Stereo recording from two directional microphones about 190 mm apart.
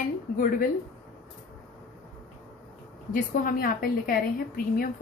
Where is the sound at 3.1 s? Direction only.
50° left (ahead or behind).